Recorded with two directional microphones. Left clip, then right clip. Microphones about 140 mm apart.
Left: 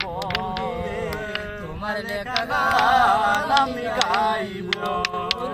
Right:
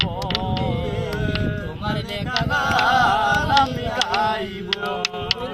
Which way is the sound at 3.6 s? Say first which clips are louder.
Even; 20° left (ahead or behind).